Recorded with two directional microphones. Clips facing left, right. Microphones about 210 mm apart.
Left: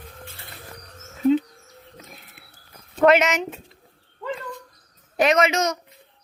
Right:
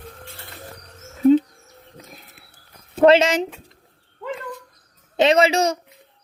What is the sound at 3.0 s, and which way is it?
Speech, 30° right (ahead or behind).